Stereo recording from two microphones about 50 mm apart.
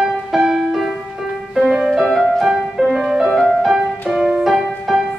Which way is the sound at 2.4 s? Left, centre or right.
Centre.